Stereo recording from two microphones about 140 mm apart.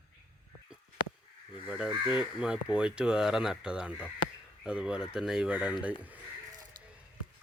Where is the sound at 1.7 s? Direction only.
5° right (ahead or behind).